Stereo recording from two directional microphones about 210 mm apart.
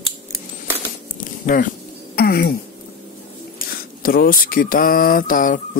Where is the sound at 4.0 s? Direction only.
45° left (ahead or behind).